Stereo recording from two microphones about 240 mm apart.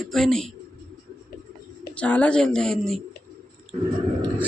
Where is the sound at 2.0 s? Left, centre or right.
Centre.